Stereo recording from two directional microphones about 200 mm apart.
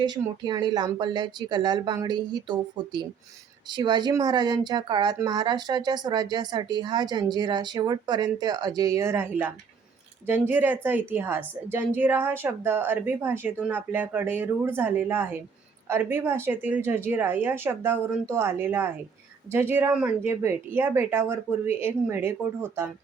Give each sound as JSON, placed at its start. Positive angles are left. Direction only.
{"t": 0.0, "sound": "a woman's voice", "side_deg": -20}